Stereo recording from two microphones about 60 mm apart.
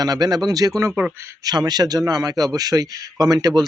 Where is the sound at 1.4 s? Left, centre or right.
Right.